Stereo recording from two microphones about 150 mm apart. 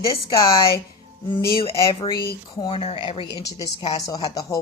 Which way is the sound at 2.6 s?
40° left (ahead or behind).